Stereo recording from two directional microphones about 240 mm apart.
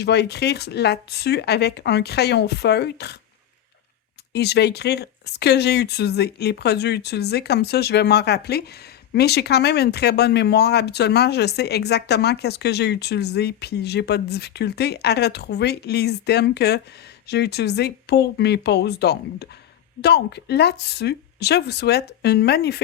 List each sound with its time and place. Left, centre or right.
0.0 s speech: left
4.3 s speech: left